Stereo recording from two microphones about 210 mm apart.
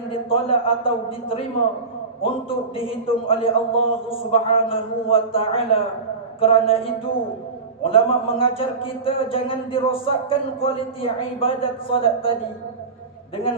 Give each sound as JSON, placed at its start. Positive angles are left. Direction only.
{"t": 0.1, "sound": "a man's voice", "side_deg": 25}
{"t": 2.2, "sound": "a man's voice", "side_deg": 25}